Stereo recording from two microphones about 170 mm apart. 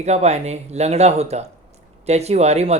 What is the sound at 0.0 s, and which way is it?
Speech, 40° right (ahead or behind).